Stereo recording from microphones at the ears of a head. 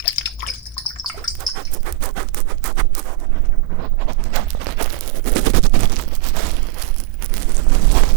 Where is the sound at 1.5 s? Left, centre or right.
Right.